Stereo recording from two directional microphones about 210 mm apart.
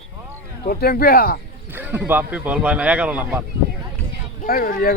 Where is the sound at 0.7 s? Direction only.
45° left (ahead or behind).